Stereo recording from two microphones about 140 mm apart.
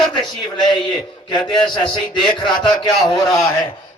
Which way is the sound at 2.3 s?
35° left (ahead or behind).